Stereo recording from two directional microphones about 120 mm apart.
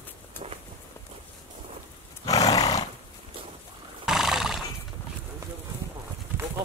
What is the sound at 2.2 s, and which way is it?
Roar, 30° left (ahead or behind).